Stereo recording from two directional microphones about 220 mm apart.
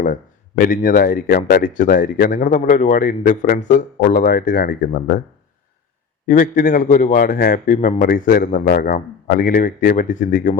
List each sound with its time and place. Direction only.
0.0 s speech: 40° left (ahead or behind)
6.2 s speech: 40° left (ahead or behind)